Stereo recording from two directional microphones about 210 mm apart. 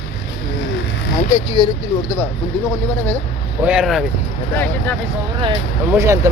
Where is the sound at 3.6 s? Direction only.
5° right (ahead or behind).